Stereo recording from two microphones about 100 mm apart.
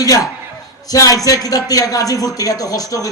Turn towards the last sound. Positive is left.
turn(degrees=35)  # may be behind; listen again after turning